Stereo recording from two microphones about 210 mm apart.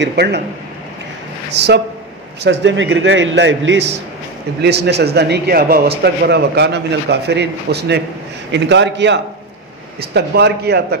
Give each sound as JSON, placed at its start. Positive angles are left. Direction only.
{"t": 0.0, "sound": "speech", "side_deg": -50}
{"t": 1.5, "sound": "a man's voice", "side_deg": -55}